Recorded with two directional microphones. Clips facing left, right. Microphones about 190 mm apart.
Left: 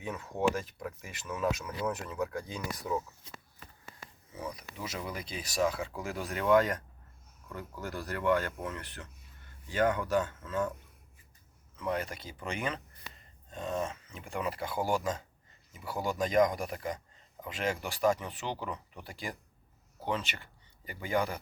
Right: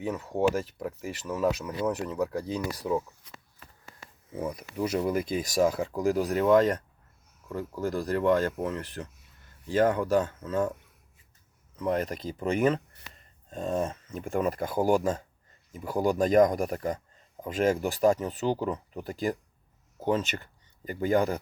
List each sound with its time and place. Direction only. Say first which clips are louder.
0.1 s speech: right 4 dB; 35° right (ahead or behind)
3.2 s speech: even; 25° left (ahead or behind)
4.3 s speech: right 7 dB; 50° right (ahead or behind)
11.8 s speech: right 6 dB; 40° right (ahead or behind)